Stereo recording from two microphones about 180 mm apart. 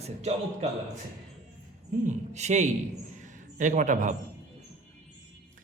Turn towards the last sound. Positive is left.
turn(degrees=-45)  # may be behind; listen again after turning